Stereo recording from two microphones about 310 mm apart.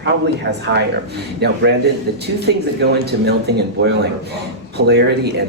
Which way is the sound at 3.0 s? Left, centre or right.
Right.